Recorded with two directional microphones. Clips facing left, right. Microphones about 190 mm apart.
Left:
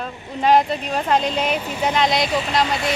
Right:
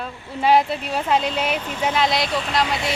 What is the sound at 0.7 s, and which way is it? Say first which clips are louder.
Speech: left 1 dB; 15° left (ahead or behind).